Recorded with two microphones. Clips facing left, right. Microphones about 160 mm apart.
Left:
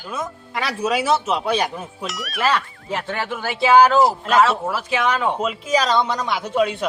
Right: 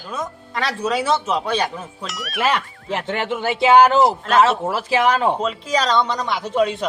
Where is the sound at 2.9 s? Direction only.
20° right (ahead or behind).